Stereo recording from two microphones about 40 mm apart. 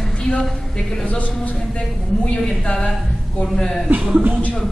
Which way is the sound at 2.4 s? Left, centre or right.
Centre.